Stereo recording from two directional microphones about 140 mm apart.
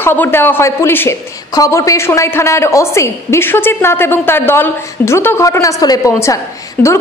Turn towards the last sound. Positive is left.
turn(degrees=20)  # may be behind; listen again after turning